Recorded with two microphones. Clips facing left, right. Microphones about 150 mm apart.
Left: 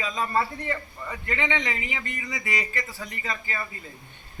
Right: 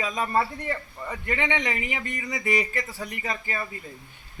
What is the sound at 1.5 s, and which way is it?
Speech, 15° right (ahead or behind).